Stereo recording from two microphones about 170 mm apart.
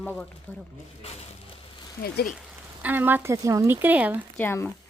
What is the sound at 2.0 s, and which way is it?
Speech, 65° left (ahead or behind).